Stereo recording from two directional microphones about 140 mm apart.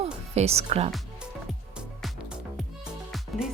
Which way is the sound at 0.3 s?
50° right (ahead or behind).